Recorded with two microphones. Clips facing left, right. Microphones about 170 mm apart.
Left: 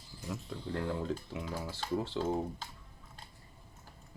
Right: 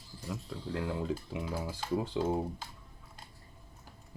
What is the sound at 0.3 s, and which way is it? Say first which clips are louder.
Speech: even; centre (ahead or behind).